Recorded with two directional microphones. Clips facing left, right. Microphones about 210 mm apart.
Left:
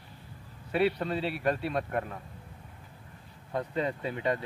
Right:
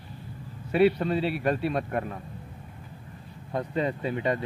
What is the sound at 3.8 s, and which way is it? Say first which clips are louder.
Speech: right 5 dB; 20° right (ahead or behind).